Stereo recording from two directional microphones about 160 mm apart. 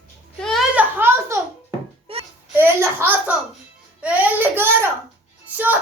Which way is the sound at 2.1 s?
35° right (ahead or behind).